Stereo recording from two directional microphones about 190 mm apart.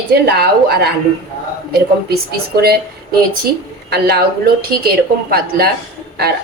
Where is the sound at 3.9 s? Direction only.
55° right (ahead or behind).